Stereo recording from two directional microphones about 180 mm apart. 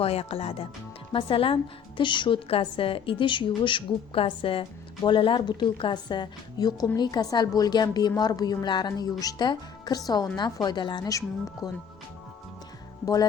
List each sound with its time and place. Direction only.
0.0 s a woman's voice: 35° left (ahead or behind)